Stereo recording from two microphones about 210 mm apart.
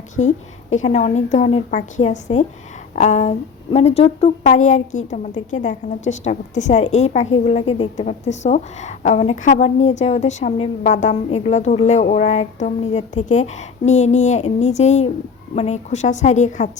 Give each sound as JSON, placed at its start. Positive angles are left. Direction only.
{"t": 0.7, "sound": "a woman's voice", "side_deg": 35}